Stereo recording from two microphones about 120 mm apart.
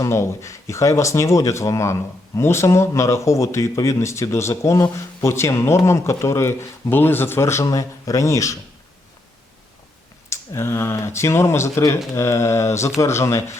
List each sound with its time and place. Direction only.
0.0 s speech: 25° left (ahead or behind)
10.2 s speech: 25° left (ahead or behind)